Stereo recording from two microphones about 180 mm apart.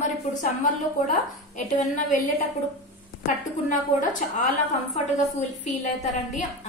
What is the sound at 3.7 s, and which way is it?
Speech, 45° left (ahead or behind).